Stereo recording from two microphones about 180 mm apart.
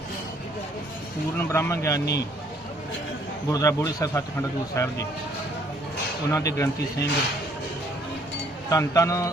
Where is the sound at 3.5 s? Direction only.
15° left (ahead or behind).